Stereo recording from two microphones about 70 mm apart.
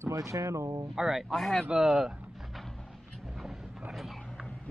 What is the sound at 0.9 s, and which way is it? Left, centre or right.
Speech, centre.